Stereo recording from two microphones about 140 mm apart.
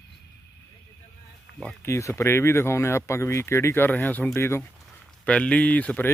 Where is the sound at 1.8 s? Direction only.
20° left (ahead or behind).